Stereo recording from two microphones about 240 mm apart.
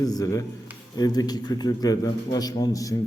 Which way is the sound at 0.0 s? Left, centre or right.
Centre.